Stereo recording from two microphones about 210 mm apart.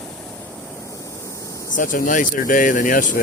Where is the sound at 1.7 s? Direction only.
40° left (ahead or behind).